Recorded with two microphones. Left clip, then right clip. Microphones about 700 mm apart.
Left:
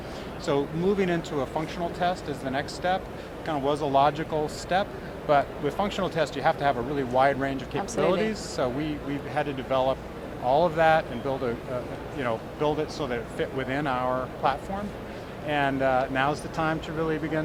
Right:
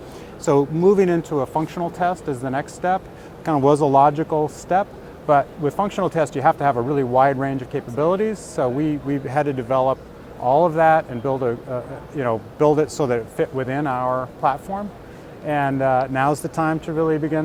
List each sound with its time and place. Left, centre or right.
0.4 s speech: right